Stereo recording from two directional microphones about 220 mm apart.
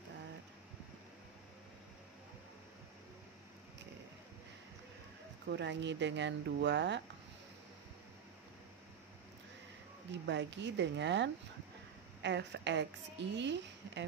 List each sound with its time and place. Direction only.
5.5 s a woman's voice: 50° right (ahead or behind)
10.2 s a woman's voice: 55° right (ahead or behind)